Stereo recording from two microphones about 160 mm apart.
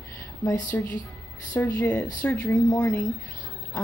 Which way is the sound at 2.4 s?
25° left (ahead or behind).